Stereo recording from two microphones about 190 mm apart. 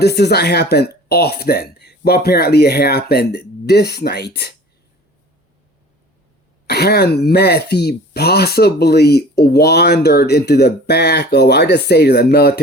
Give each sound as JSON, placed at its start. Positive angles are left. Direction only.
{"t": 0.2, "sound": "speech", "side_deg": 60}
{"t": 6.7, "sound": "speech", "side_deg": 55}